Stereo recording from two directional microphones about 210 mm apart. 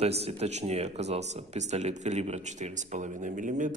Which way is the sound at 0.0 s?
30° right (ahead or behind).